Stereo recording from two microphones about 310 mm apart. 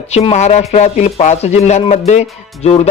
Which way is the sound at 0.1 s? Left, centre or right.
Centre.